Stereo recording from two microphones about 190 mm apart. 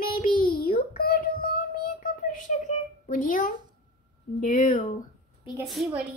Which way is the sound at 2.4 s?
40° left (ahead or behind).